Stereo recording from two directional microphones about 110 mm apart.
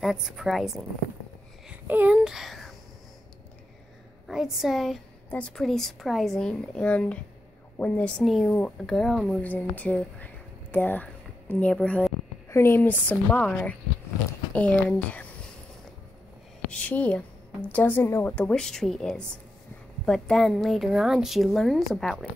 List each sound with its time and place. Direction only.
0.0 s speech: 5° right (ahead or behind)
1.9 s speech: 15° right (ahead or behind)
4.3 s speech: 5° right (ahead or behind)
8.2 s speech: centre (ahead or behind)
9.4 s speech: 15° left (ahead or behind)
12.4 s speech: 25° left (ahead or behind)
16.7 s speech: 15° left (ahead or behind)